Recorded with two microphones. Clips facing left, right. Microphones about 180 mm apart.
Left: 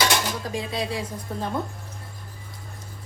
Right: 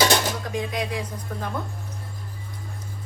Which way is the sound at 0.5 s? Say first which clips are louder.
Even; 30° left (ahead or behind).